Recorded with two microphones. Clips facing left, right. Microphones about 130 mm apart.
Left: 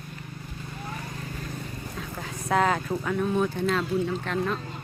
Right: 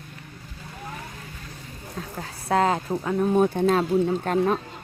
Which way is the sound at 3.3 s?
45° right (ahead or behind).